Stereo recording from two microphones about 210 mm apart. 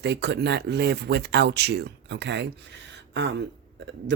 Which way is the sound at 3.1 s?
60° right (ahead or behind).